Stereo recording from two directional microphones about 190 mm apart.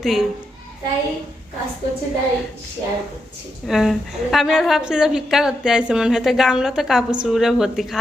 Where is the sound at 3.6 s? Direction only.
Centre (ahead or behind).